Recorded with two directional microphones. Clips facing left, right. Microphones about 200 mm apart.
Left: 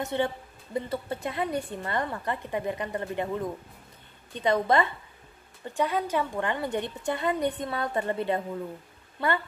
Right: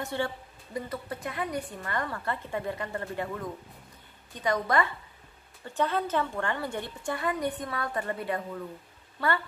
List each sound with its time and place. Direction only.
0.0 s a woman's voice: 20° left (ahead or behind)
5.7 s a woman's voice: 10° left (ahead or behind)